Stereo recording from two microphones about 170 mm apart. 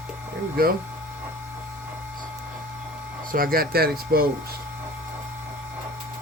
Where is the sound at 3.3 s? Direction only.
60° right (ahead or behind).